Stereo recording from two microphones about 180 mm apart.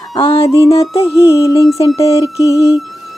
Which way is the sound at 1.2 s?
20° left (ahead or behind).